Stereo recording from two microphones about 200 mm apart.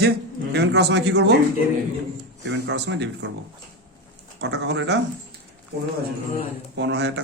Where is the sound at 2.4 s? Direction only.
60° right (ahead or behind).